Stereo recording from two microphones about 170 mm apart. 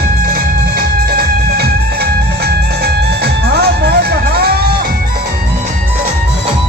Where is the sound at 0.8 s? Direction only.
65° right (ahead or behind).